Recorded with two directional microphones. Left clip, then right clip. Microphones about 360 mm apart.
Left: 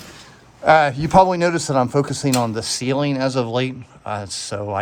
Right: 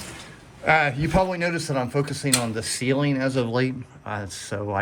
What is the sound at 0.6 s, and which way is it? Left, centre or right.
Speech, centre.